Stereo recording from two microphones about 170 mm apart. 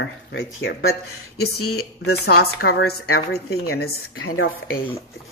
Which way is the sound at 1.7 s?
70° left (ahead or behind).